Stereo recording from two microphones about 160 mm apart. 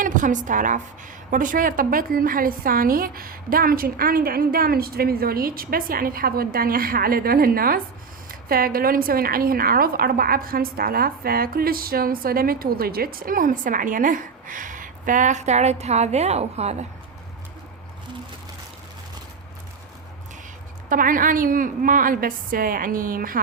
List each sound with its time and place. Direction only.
0.0 s a woman's voice: 55° right (ahead or behind)
20.9 s a woman's voice: 60° right (ahead or behind)